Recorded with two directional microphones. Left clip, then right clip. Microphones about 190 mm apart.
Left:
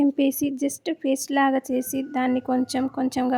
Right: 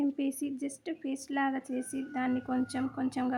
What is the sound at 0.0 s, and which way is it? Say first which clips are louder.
A woman's voice: left 11 dB; 40° left (ahead or behind).